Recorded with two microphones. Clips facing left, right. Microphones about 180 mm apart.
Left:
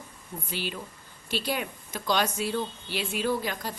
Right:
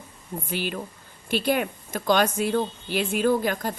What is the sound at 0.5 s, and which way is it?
Speech, 55° right (ahead or behind).